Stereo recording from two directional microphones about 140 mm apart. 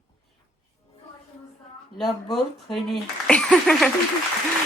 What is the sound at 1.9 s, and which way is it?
Speech, centre (ahead or behind).